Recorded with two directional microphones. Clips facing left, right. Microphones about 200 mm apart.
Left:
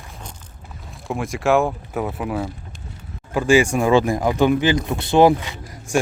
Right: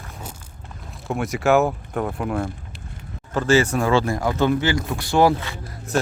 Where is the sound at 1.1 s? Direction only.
Centre (ahead or behind).